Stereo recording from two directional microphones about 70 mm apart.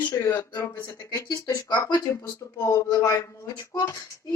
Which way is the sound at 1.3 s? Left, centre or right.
Left.